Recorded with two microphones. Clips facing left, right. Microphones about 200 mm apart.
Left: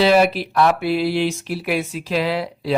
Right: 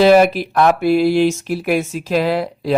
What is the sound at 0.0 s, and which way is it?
Speech, 50° right (ahead or behind).